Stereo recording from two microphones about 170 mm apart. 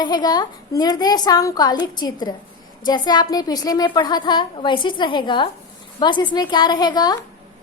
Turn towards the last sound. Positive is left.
turn(degrees=25)  # may be behind; listen again after turning